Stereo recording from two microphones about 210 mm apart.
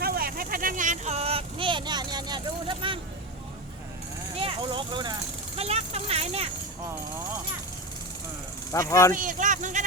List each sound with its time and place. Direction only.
0.0 s vehicle: 45° right (ahead or behind); by 3.0 s 25° right (ahead or behind)
4.4 s speech: 25° right (ahead or behind)
5.5 s vehicle: 30° right (ahead or behind)
8.7 s speech: 15° left (ahead or behind)
9.1 s speech: 40° right (ahead or behind)